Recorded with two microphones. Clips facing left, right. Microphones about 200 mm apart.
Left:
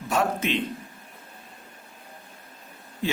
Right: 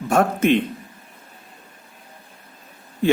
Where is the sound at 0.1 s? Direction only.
50° right (ahead or behind).